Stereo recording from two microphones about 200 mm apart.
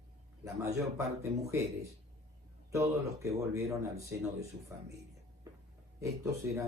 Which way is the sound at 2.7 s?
15° right (ahead or behind).